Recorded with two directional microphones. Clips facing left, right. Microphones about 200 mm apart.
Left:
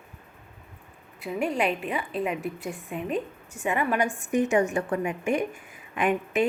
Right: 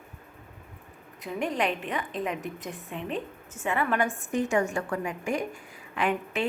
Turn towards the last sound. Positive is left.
turn(degrees=20)  # may be behind; listen again after turning